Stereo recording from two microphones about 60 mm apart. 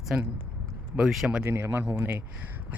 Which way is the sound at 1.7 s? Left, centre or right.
Right.